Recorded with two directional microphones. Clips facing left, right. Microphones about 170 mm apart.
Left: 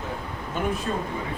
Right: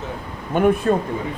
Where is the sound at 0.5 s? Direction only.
60° right (ahead or behind).